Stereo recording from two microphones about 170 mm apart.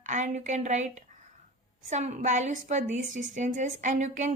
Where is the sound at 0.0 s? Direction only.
45° right (ahead or behind).